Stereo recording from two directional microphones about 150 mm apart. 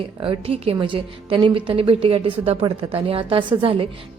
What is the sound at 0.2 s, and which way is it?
A woman's voice, 35° right (ahead or behind).